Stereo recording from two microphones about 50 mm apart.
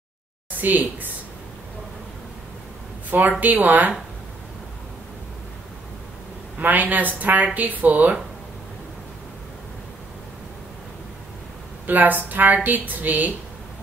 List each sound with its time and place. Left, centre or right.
0.6 s speech: right
3.1 s speech: right
6.6 s speech: right
11.8 s speech: right